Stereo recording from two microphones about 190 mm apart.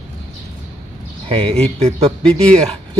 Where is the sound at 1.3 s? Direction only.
35° right (ahead or behind).